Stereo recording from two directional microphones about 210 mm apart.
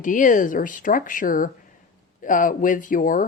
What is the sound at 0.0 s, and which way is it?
Speech, 40° left (ahead or behind).